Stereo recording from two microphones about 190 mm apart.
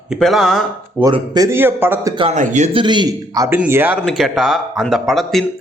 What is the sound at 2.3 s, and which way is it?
Speech, 40° right (ahead or behind).